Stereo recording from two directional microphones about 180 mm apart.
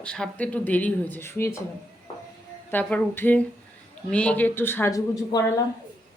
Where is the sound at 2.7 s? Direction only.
10° left (ahead or behind).